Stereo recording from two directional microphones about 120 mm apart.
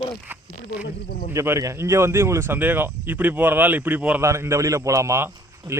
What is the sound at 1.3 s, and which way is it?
Speech, 25° right (ahead or behind).